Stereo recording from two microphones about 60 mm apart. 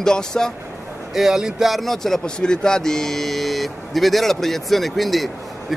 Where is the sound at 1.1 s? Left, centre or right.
Centre.